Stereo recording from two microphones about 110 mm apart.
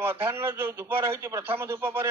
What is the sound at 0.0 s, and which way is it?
Speech, 20° right (ahead or behind).